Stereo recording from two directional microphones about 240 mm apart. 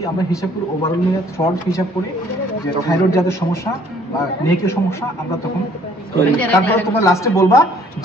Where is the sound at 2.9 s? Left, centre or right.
Centre.